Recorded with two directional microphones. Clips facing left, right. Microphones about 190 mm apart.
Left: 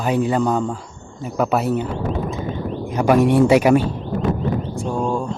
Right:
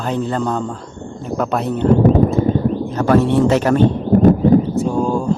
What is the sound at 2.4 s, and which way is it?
Clip-clop, 45° right (ahead or behind).